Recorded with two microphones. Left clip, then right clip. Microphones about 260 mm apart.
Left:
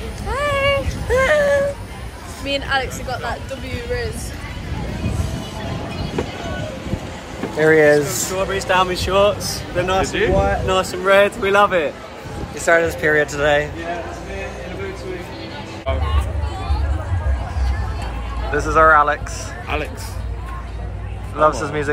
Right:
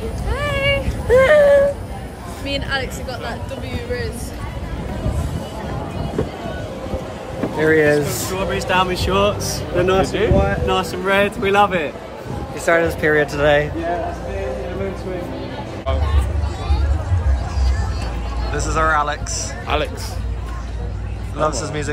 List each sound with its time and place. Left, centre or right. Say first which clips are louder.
0.3 s a sound: left 2 dB; centre
1.1 s a sound: right 4 dB; centre
2.4 s speech: left 3 dB; centre
7.5 s speech: left 2 dB; centre
8.4 s speech: left 1 dB; centre
10.0 s speech: even; centre
10.3 s speech: left 1 dB; centre
18.5 s speech: left 6 dB; centre
21.4 s speech: left 4 dB; centre